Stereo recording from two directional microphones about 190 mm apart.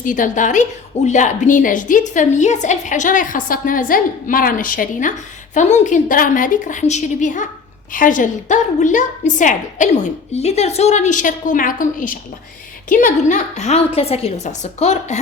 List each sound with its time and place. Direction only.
0.0 s a woman's voice: 45° left (ahead or behind)